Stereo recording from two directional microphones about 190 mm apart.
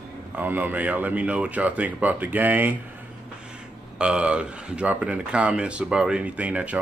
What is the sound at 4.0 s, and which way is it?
Speech, 5° right (ahead or behind).